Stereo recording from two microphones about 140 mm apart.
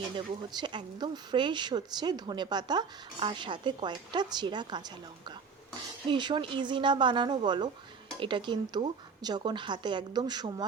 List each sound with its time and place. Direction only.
0.5 s speech: 35° right (ahead or behind)
6.1 s speech: 35° right (ahead or behind)